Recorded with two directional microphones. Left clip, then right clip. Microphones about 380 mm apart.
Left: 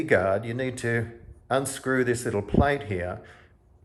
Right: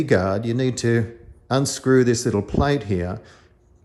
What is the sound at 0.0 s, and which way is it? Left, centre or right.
Speech, centre.